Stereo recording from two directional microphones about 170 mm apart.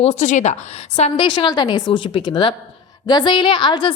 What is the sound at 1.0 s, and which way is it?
A woman's voice, 30° left (ahead or behind).